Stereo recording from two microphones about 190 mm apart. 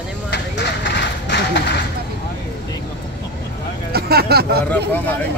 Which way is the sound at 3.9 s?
55° right (ahead or behind).